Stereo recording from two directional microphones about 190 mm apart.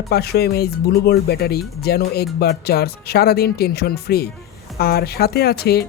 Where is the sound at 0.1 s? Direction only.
55° left (ahead or behind).